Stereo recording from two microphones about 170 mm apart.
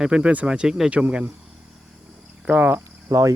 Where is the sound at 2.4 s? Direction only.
10° right (ahead or behind).